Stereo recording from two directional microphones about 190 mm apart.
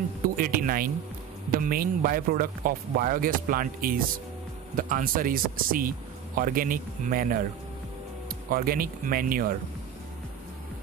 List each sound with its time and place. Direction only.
0.4 s speech: 50° right (ahead or behind)